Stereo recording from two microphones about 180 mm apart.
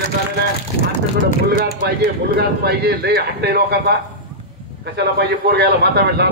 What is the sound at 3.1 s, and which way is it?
A man's voice, 60° right (ahead or behind).